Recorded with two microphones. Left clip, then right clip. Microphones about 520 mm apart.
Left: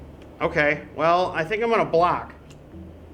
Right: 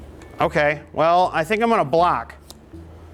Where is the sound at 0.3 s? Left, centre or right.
Right.